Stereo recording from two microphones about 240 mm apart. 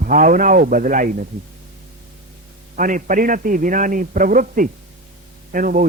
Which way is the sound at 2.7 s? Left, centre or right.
Right.